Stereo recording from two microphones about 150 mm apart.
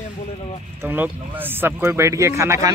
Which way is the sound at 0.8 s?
10° right (ahead or behind).